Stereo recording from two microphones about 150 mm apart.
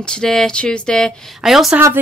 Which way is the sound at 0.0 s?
5° left (ahead or behind).